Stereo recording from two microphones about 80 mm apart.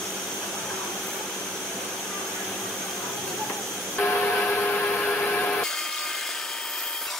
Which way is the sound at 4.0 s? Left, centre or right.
Left.